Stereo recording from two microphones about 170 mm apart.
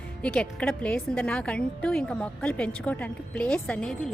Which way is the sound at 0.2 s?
5° left (ahead or behind).